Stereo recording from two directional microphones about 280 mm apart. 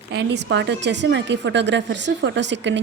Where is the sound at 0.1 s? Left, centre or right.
Right.